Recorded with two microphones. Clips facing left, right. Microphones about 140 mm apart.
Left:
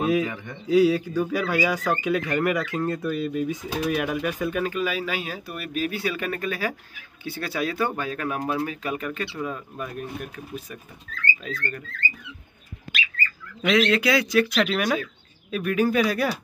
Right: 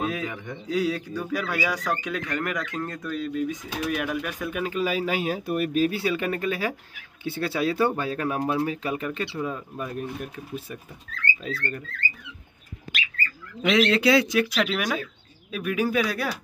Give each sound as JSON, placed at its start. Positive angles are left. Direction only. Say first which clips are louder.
{"t": 0.0, "sound": "a man's voice", "louder": "left 6 dB", "side_deg": 10}
{"t": 4.8, "sound": "speech", "louder": "right 3 dB", "side_deg": -40}
{"t": 13.7, "sound": "speech", "louder": "right 1 dB", "side_deg": -25}
{"t": 14.5, "sound": "a man's voice", "louder": "left 3 dB", "side_deg": -5}